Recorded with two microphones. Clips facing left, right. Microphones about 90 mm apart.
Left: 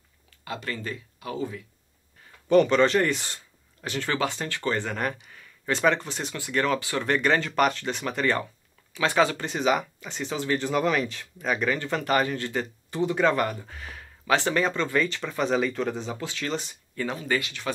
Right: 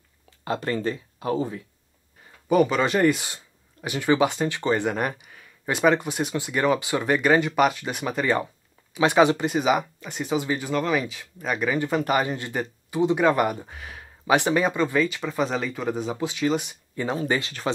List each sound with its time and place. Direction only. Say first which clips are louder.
0.5 s speech: right 7 dB; 40° right (ahead or behind)
2.4 s speech: left 1 dB; 10° right (ahead or behind)
10.7 s speech: right 2 dB; centre (ahead or behind)
12.1 s speech: right 1 dB; 15° right (ahead or behind)
17.4 s speech: right 1 dB; 40° right (ahead or behind)